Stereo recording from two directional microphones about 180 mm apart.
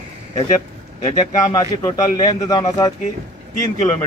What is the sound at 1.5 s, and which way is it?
A man's voice, 20° left (ahead or behind).